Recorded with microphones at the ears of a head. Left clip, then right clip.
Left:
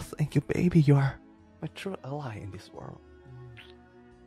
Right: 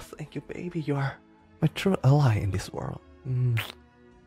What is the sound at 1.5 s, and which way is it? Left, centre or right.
Speech, right.